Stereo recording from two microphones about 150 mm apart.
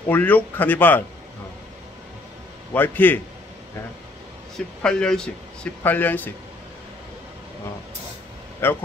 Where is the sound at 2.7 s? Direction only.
10° left (ahead or behind).